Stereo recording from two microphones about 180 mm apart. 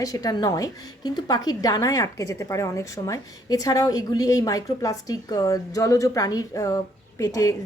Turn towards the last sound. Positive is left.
turn(degrees=20)  # may be behind; listen again after turning